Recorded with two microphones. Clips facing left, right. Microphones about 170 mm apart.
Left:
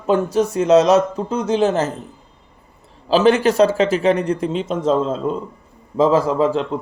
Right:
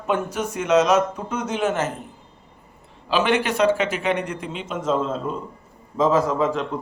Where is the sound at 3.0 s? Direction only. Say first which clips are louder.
Left 7 dB; 35° left (ahead or behind).